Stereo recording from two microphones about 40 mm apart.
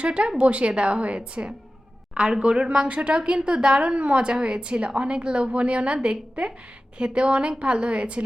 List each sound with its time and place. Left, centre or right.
0.0 s a woman's voice: right
2.2 s a woman's voice: right